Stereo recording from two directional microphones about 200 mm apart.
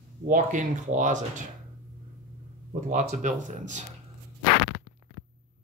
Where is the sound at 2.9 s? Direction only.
40° right (ahead or behind).